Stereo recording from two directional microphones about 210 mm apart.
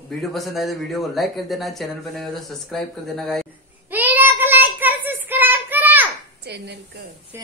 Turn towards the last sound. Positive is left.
turn(degrees=-55)  # may be behind; listen again after turning